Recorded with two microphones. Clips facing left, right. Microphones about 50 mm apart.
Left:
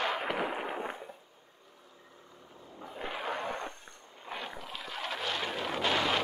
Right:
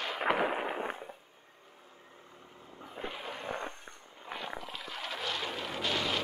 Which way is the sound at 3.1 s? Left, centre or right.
Left.